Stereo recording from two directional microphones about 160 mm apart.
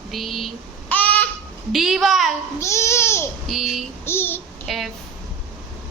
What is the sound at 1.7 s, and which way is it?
Speech, centre (ahead or behind).